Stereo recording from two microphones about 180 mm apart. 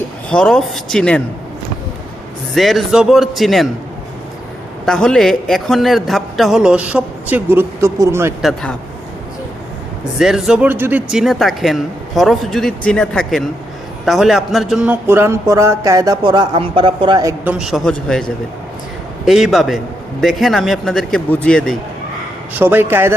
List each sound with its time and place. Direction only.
0.3 s speech: 5° left (ahead or behind)
2.6 s speech: centre (ahead or behind)
4.9 s speech: 5° left (ahead or behind); by 8.3 s 15° right (ahead or behind)
8.4 s speech: centre (ahead or behind)
10.2 s a man's voice: centre (ahead or behind); by 17.3 s 25° right (ahead or behind)
17.4 s speech: 5° right (ahead or behind)
22.5 s a man's voice: 10° right (ahead or behind)